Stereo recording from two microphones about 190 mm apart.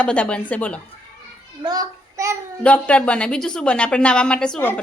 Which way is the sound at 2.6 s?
5° left (ahead or behind).